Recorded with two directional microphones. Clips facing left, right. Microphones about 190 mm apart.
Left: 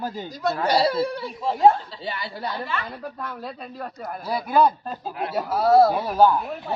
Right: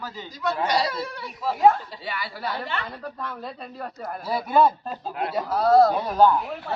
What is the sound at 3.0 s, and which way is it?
A man's voice, 5° left (ahead or behind).